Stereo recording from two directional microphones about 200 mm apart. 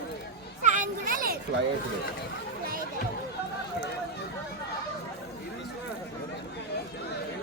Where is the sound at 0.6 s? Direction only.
40° right (ahead or behind).